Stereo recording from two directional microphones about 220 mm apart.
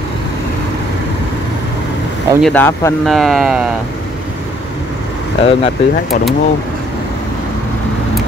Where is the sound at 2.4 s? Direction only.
10° left (ahead or behind).